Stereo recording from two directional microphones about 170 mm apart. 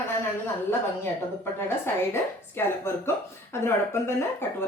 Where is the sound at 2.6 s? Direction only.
15° left (ahead or behind).